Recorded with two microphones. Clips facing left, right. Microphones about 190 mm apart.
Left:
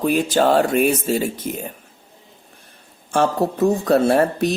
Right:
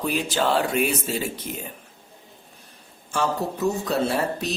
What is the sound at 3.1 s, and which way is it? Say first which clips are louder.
Speech: left 6 dB; 55° left (ahead or behind).